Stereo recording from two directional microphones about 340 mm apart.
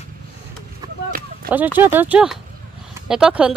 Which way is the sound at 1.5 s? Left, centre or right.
Centre.